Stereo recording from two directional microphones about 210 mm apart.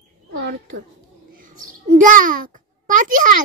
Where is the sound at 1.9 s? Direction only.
40° right (ahead or behind).